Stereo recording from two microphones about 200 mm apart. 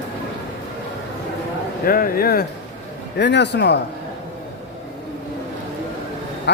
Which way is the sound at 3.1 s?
60° left (ahead or behind).